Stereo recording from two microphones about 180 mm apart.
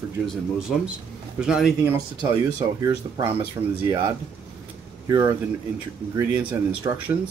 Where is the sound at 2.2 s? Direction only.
15° right (ahead or behind).